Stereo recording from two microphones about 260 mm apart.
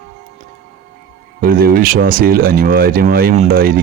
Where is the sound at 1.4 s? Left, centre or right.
Right.